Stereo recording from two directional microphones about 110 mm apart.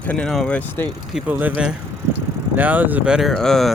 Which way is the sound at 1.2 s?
15° right (ahead or behind).